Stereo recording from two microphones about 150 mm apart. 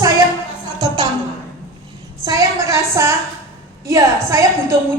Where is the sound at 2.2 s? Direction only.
25° right (ahead or behind).